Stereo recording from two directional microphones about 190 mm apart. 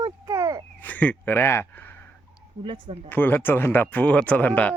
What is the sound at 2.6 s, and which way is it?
Speech, 30° right (ahead or behind).